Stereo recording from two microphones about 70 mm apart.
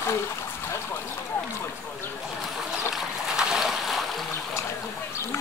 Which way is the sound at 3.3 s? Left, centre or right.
Centre.